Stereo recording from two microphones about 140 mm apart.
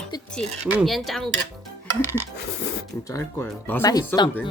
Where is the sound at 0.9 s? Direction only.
Centre (ahead or behind).